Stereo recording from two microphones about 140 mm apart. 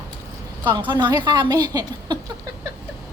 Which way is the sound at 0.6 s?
35° right (ahead or behind).